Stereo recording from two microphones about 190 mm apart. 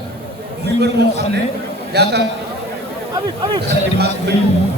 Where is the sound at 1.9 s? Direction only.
60° right (ahead or behind).